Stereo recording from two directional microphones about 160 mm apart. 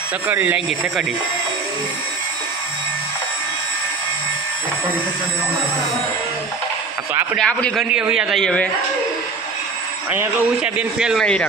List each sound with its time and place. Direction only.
0.3 s speech: 10° right (ahead or behind)
7.3 s speech: 5° left (ahead or behind)
10.1 s speech: 10° right (ahead or behind)